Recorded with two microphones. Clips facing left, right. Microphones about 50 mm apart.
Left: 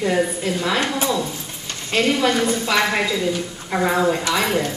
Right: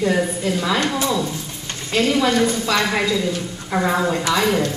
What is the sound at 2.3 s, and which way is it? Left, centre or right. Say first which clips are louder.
A woman's voice: right 1 dB; centre.